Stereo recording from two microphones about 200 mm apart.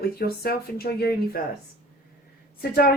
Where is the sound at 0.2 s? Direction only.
50° left (ahead or behind).